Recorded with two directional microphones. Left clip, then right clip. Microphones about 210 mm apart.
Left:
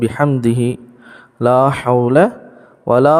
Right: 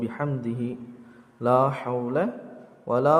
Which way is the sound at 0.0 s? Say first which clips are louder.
Left 14 dB; 50° left (ahead or behind).